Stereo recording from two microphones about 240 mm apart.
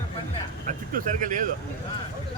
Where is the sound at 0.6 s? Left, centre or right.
Right.